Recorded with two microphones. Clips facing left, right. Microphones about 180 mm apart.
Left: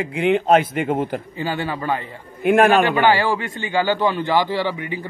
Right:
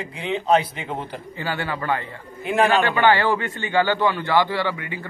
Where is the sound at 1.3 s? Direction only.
15° left (ahead or behind).